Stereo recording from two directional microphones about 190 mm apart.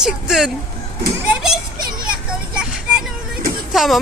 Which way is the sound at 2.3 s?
5° right (ahead or behind).